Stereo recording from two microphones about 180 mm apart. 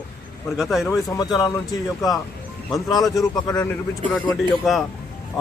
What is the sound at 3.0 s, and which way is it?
Speech, centre (ahead or behind).